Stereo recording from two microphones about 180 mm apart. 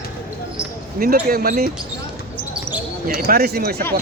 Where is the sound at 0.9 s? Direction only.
55° right (ahead or behind).